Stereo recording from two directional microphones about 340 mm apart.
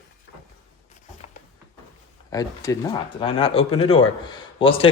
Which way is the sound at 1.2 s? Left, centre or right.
Centre.